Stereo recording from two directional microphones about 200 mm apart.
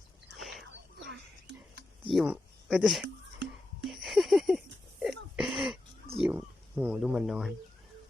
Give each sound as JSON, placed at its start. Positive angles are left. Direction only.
{"t": 0.3, "sound": "whispering", "side_deg": 0}
{"t": 0.9, "sound": "whispering", "side_deg": -60}
{"t": 2.0, "sound": "speech", "side_deg": -5}
{"t": 3.8, "sound": "a sound", "side_deg": 0}
{"t": 6.1, "sound": "wild animals", "side_deg": -5}